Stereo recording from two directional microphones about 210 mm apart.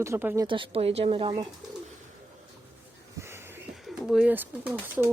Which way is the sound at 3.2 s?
10° right (ahead or behind).